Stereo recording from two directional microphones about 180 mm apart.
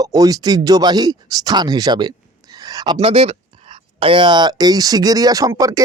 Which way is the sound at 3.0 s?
35° right (ahead or behind).